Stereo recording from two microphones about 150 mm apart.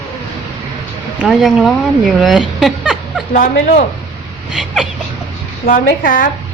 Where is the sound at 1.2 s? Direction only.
Centre (ahead or behind).